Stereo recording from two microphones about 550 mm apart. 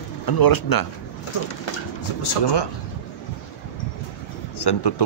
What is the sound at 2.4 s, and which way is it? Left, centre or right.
Speech, left.